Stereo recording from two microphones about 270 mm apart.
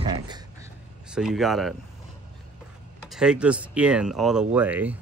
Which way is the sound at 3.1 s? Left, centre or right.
Centre.